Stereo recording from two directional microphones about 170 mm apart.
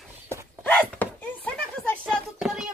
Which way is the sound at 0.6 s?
10° left (ahead or behind).